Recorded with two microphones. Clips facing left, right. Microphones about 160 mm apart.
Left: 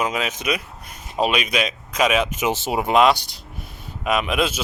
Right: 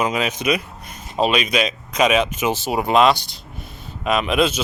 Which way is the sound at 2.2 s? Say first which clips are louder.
Right 1 dB; 20° left (ahead or behind).